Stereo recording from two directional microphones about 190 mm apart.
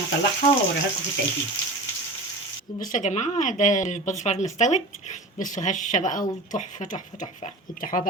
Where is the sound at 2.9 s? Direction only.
40° left (ahead or behind).